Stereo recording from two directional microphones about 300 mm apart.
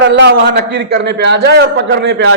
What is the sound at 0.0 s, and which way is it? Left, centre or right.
A man's voice, right.